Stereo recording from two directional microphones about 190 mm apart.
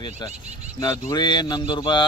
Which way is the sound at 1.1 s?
25° left (ahead or behind).